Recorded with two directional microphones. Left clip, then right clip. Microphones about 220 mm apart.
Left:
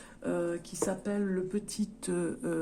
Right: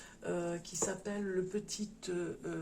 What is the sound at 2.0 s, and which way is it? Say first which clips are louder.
Speech: left 6 dB; 50° left (ahead or behind).